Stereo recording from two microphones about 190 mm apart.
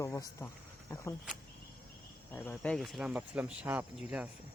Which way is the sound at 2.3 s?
10° left (ahead or behind).